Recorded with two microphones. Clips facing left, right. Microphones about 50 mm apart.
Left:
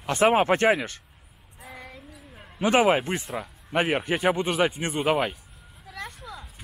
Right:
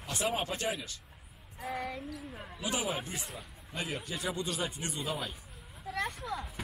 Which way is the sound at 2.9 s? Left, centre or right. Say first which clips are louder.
Left 14 dB; left.